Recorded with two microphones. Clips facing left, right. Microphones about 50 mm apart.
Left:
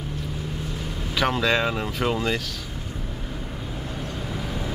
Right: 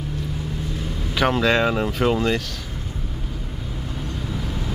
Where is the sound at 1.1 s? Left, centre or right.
Centre.